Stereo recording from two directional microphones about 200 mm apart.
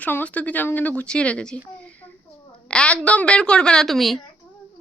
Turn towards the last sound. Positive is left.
turn(degrees=0)  # may be behind; listen again after turning